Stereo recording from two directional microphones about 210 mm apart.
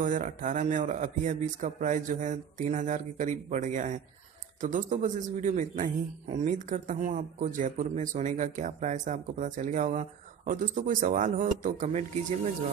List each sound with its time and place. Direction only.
0.0 s speech: 40° right (ahead or behind)